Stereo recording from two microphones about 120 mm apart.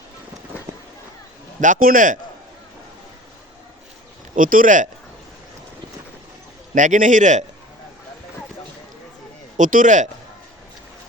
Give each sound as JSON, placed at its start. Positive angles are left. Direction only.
{"t": 1.6, "sound": "a man's voice", "side_deg": -90}
{"t": 4.4, "sound": "a man's voice", "side_deg": -90}
{"t": 6.7, "sound": "a man's voice", "side_deg": -90}
{"t": 9.6, "sound": "a man's voice", "side_deg": -90}